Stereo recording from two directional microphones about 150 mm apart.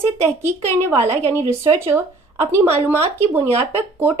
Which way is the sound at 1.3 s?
15° right (ahead or behind).